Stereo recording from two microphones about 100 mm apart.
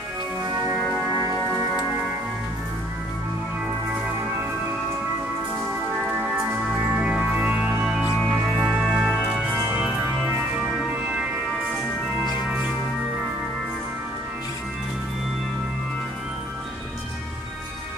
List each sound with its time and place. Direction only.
6.2 s music: 20° right (ahead or behind)
8.2 s music: 10° left (ahead or behind); by 9.4 s 5° right (ahead or behind)